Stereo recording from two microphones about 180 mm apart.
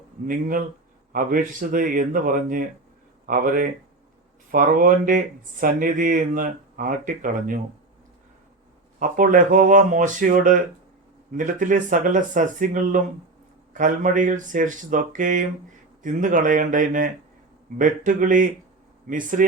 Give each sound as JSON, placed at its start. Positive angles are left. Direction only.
{"t": 0.3, "sound": "speech", "side_deg": -50}
{"t": 9.0, "sound": "speech", "side_deg": -50}